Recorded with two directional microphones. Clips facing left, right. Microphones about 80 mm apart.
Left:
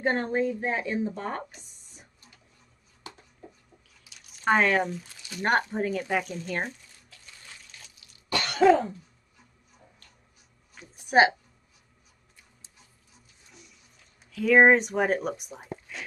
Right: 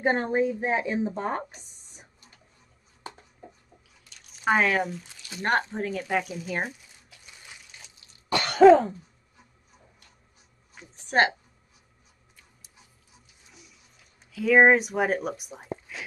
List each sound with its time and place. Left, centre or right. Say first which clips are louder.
0.0 s speech: right 2 dB; centre
4.0 s drip: even; centre
4.4 s speech: even; centre
5.4 s a sound: left 1 dB; centre
8.0 s cough: right 3 dB; right
11.0 s a woman's voice: left 3 dB; centre
13.5 s a sound: left 1 dB; centre
14.3 s speech: even; centre
15.9 s a sound: right 1 dB; centre